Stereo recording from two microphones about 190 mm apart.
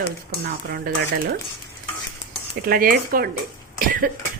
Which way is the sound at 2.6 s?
50° right (ahead or behind).